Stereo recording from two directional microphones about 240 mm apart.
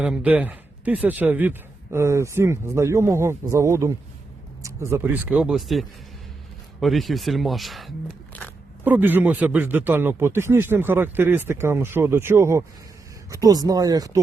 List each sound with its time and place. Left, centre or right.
0.0 s speech: centre